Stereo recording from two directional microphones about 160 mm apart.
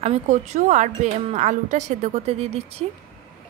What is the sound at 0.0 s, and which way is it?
A woman's voice, 45° right (ahead or behind).